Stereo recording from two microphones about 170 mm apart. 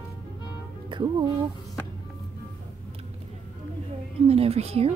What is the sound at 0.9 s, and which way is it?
Music, 30° right (ahead or behind).